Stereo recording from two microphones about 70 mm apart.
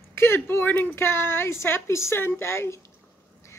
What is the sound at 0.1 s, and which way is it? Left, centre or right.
A woman's voice, left.